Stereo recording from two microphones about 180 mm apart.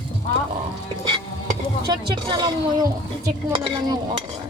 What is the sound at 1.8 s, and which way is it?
Speech, 25° right (ahead or behind).